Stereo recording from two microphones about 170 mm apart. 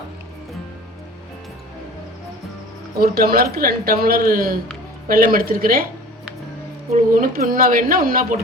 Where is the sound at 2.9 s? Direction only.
65° right (ahead or behind).